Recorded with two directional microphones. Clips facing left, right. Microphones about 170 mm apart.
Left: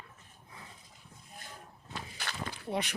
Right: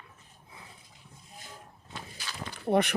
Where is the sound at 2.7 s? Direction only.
55° right (ahead or behind).